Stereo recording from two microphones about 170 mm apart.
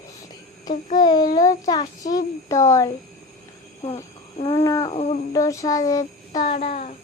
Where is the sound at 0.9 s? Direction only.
25° left (ahead or behind).